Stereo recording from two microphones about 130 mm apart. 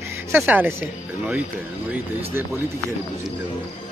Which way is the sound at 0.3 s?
15° right (ahead or behind).